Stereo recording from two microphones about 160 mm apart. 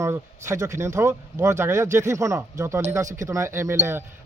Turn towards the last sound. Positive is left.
turn(degrees=-15)  # may be behind; listen again after turning